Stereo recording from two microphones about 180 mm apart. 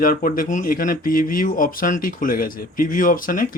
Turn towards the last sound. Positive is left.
turn(degrees=50)  # may be behind; listen again after turning